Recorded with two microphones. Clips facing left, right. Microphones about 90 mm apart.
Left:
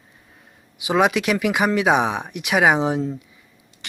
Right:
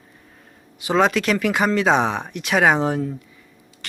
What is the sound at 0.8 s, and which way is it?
Speech, 15° left (ahead or behind).